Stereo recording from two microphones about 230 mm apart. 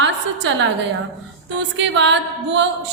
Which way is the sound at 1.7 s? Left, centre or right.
Right.